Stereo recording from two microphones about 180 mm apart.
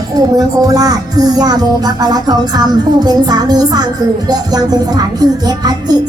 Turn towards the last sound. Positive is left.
turn(degrees=-20)  # may be behind; listen again after turning